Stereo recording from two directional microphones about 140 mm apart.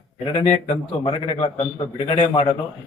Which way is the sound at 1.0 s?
35° left (ahead or behind).